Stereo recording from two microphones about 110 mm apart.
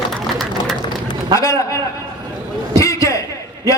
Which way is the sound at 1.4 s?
25° left (ahead or behind).